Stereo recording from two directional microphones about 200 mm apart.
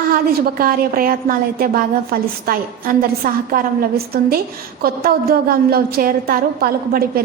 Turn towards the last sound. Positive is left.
turn(degrees=-50)  # may be behind; listen again after turning